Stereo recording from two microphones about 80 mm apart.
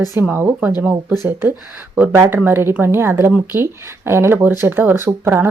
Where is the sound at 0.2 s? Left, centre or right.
Right.